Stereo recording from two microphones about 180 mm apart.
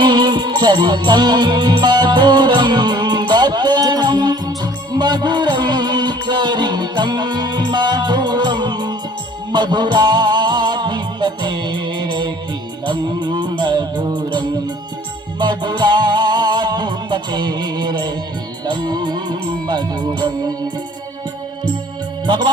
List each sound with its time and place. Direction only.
0.0 s music: 25° right (ahead or behind)